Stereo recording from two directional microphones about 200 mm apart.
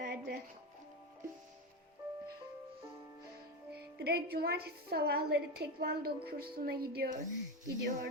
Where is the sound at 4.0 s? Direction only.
50° right (ahead or behind).